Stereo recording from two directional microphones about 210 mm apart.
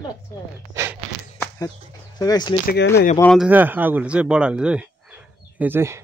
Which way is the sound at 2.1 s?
20° left (ahead or behind).